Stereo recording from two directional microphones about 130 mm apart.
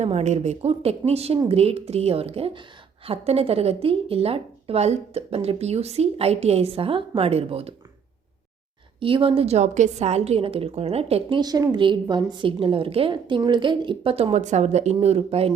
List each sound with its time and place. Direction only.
0.0 s a woman's voice: 60° right (ahead or behind)
9.0 s a woman's voice: 40° right (ahead or behind)
11.3 s a woman's voice: 30° right (ahead or behind); by 14.3 s 45° right (ahead or behind)
14.3 s a woman's voice: 60° right (ahead or behind)